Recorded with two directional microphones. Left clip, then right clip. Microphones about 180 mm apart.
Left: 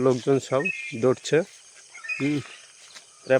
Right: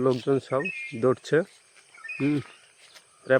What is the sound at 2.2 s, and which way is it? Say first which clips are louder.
Speech: right 1 dB; 15° right (ahead or behind).